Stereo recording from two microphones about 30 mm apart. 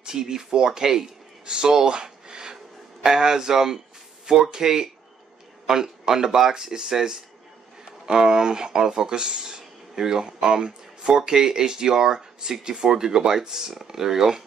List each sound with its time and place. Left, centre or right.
0.0 s speech: right
1.4 s speech: right
2.0 s a sound: right
3.2 s speech: centre